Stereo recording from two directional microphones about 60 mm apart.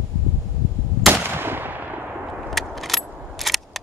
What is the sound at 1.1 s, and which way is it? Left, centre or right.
Gunshot, right.